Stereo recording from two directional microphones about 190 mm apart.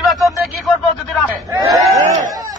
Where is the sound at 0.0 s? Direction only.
Centre (ahead or behind).